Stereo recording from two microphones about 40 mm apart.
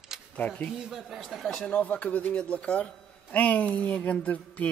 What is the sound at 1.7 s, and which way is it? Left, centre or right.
Speech, left.